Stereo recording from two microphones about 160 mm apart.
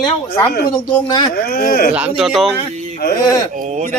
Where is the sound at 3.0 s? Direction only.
80° left.